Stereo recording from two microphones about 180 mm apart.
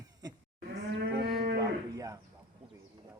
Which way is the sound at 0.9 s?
60° right (ahead or behind).